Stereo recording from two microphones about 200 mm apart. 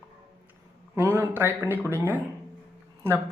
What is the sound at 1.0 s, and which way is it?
A woman's voice, 15° right (ahead or behind).